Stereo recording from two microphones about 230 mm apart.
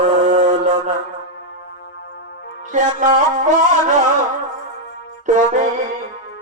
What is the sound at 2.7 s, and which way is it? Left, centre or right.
Music, right.